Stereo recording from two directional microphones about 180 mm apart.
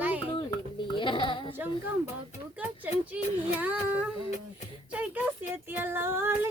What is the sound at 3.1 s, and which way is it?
Speech, 10° right (ahead or behind).